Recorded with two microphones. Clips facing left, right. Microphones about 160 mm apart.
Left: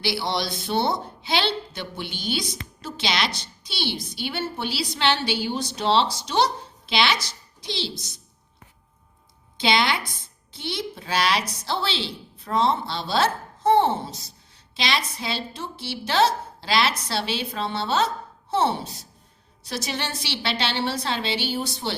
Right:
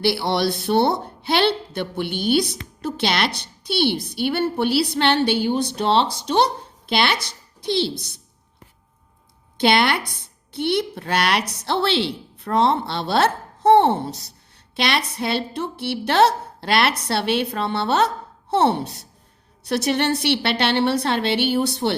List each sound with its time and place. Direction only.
0.0 s speech: 60° right (ahead or behind)
9.6 s speech: 60° right (ahead or behind)